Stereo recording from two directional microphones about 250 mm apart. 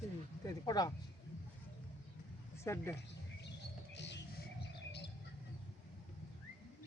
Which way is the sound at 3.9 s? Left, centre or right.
Left.